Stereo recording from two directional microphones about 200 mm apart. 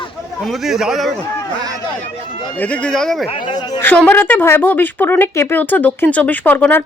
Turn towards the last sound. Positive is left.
turn(degrees=10)  # may be behind; listen again after turning